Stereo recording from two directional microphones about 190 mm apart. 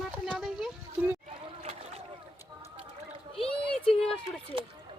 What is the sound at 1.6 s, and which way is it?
Boat, 30° right (ahead or behind).